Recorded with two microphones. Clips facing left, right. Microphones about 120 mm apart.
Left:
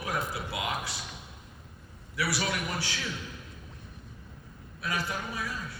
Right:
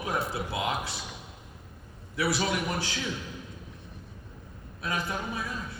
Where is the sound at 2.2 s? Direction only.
25° right (ahead or behind).